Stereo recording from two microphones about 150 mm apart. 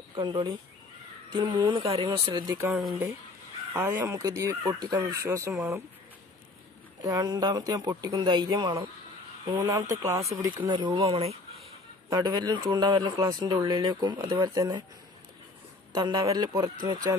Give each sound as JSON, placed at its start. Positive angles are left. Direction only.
{"t": 0.1, "sound": "speech", "side_deg": -30}
{"t": 3.7, "sound": "speech", "side_deg": -15}
{"t": 7.0, "sound": "speech", "side_deg": -25}
{"t": 12.1, "sound": "speech", "side_deg": -25}
{"t": 15.9, "sound": "speech", "side_deg": -30}